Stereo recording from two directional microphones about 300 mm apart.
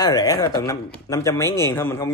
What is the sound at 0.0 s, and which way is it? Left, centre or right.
A man's voice, centre.